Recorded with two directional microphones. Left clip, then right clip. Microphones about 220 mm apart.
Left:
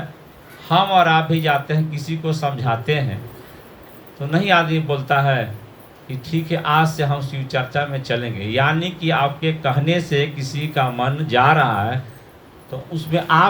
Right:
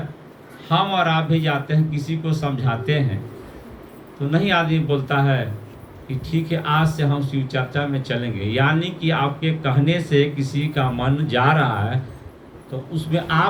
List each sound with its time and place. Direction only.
0.7 s speech: 25° right (ahead or behind)
4.3 s speech: 25° right (ahead or behind)